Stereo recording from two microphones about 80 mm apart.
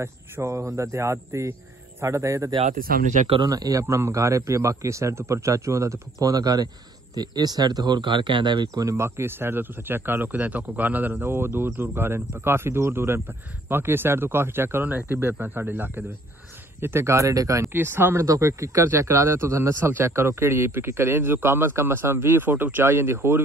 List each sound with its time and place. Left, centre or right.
0.0 s speech: right
3.4 s a man's voice: right
3.8 s speech: right
8.9 s a man's voice: right
17.7 s a man's voice: right
18.2 s speech: right